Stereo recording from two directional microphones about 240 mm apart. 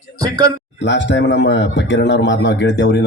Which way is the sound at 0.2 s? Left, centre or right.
Centre.